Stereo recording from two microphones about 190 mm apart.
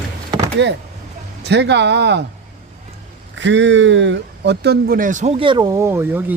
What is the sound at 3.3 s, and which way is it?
Speech, 75° right (ahead or behind).